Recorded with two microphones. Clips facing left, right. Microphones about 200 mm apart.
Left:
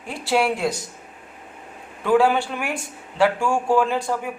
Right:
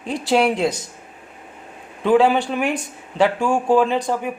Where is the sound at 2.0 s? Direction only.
20° right (ahead or behind).